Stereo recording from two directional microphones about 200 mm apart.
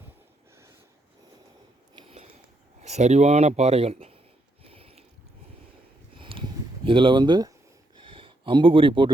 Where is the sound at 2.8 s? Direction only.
35° right (ahead or behind).